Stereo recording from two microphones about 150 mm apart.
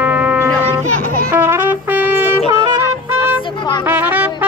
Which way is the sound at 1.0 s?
75° right (ahead or behind).